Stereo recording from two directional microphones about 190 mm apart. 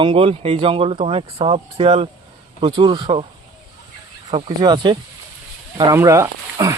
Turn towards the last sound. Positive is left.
turn(degrees=-15)  # may be behind; listen again after turning